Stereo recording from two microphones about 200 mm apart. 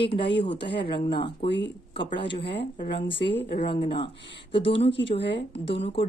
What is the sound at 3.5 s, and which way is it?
Speech, 30° left (ahead or behind).